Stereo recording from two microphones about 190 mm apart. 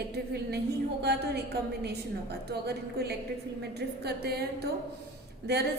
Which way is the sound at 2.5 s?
60° right (ahead or behind).